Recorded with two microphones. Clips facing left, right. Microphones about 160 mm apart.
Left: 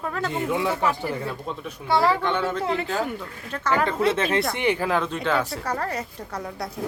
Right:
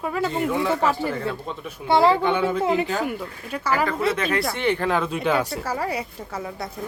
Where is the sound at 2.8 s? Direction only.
5° right (ahead or behind).